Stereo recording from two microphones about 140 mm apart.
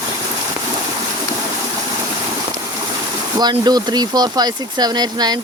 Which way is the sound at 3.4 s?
30° right (ahead or behind).